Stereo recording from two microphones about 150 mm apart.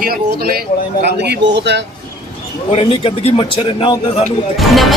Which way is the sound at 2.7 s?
40° left (ahead or behind).